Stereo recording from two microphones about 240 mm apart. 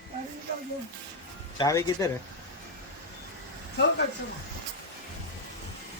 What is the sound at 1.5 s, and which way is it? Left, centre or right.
Speech, centre.